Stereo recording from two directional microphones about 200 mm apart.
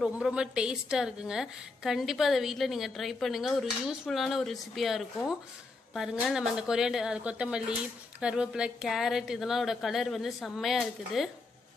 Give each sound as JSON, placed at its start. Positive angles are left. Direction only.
{"t": 0.0, "sound": "a woman's voice", "side_deg": -5}